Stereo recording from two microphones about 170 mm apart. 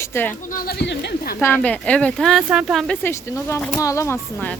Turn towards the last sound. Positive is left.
turn(degrees=15)  # may be behind; listen again after turning